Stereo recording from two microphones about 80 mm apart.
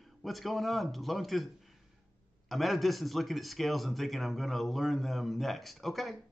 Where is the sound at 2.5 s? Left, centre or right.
Centre.